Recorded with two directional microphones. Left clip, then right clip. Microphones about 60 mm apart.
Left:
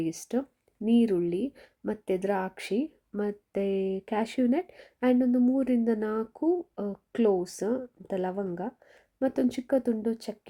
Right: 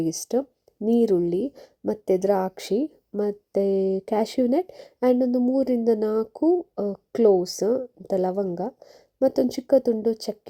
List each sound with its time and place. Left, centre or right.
0.9 s a woman's voice: right